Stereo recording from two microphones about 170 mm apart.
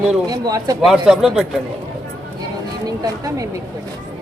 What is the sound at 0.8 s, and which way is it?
Speech, centre (ahead or behind).